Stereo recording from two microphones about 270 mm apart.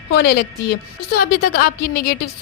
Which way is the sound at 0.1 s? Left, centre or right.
Left.